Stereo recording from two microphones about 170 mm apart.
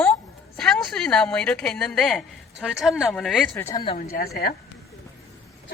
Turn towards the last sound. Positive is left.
turn(degrees=55)  # may be behind; listen again after turning